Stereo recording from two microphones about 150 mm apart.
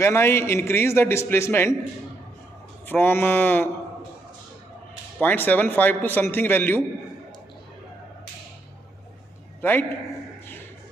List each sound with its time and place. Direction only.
0.0 s a man's voice: 15° left (ahead or behind)
2.9 s a man's voice: 15° left (ahead or behind)
5.2 s a man's voice: 10° left (ahead or behind)
9.6 s a man's voice: 15° left (ahead or behind)